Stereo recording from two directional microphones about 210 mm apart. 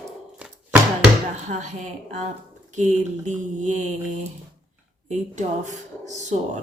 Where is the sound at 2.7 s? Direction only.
35° right (ahead or behind).